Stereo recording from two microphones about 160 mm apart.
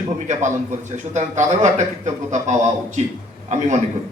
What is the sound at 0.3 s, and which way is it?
A man's voice, 50° right (ahead or behind).